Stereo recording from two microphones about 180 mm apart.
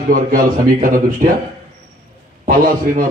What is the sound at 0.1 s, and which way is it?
A man's voice, 50° right (ahead or behind).